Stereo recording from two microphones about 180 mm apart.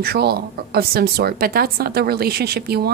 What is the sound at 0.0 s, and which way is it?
Speech, 65° right (ahead or behind).